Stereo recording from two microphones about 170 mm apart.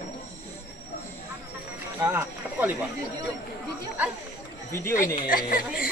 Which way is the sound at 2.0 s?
10° right (ahead or behind).